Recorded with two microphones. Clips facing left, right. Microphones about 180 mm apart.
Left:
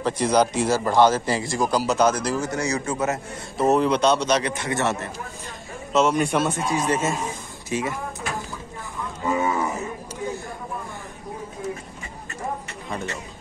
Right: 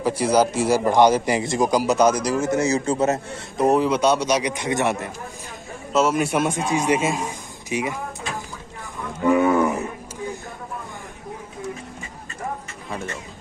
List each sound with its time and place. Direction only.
0.0 s a man's voice: 10° right (ahead or behind)
2.4 s speech: 25° right (ahead or behind)
3.5 s a man's voice: 10° right (ahead or behind)
9.2 s livestock: 65° right (ahead or behind)